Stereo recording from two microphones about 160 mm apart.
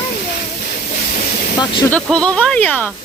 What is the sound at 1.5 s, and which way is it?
Speech, 25° left (ahead or behind).